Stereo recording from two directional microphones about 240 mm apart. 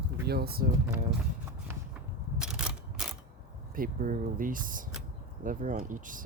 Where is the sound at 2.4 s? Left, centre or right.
Centre.